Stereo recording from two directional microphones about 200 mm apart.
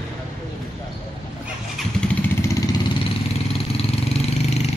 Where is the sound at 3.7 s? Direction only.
30° left (ahead or behind).